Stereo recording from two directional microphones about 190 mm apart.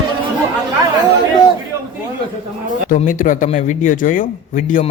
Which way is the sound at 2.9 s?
45° left (ahead or behind).